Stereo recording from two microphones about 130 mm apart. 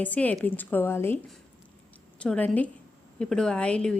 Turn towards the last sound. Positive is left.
turn(degrees=10)  # may be behind; listen again after turning